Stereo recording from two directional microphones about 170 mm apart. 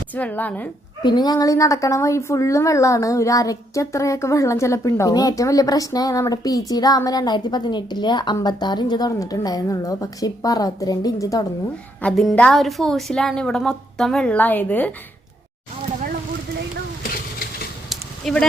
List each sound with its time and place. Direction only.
0.1 s a woman's voice: 10° left (ahead or behind)
1.0 s a woman's voice: 25° left (ahead or behind)
12.0 s a woman's voice: centre (ahead or behind)
17.8 s a sound: 5° left (ahead or behind)